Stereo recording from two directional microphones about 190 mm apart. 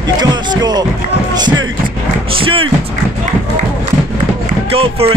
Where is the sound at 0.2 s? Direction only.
20° right (ahead or behind).